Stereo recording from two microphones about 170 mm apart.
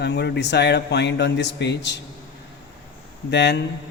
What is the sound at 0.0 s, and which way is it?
Speech, 85° left.